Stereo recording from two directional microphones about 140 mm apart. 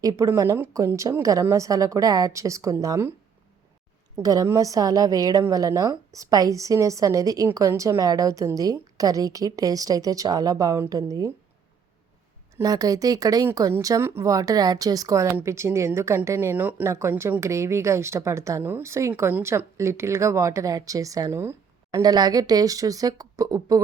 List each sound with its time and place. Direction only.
0.0 s a woman's voice: 25° right (ahead or behind)
4.1 s a woman's voice: 25° right (ahead or behind)
12.6 s a woman's voice: 25° right (ahead or behind)